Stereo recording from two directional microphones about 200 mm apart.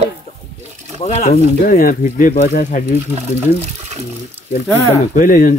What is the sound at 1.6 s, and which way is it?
Speech, 45° left (ahead or behind).